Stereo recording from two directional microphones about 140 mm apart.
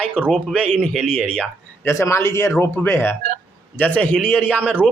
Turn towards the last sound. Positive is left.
turn(degrees=10)  # may be behind; listen again after turning